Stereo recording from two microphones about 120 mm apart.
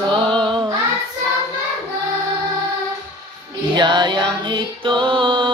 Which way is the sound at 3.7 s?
40° right (ahead or behind).